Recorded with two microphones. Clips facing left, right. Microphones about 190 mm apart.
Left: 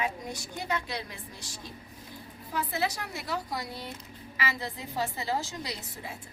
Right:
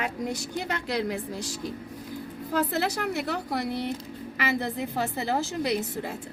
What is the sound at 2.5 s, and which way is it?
A woman's voice, 75° right (ahead or behind).